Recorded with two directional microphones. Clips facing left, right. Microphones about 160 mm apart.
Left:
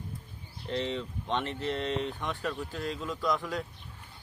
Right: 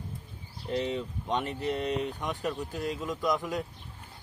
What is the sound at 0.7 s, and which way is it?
Speech, 10° right (ahead or behind).